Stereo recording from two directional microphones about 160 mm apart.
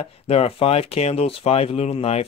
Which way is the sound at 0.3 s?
40° left (ahead or behind).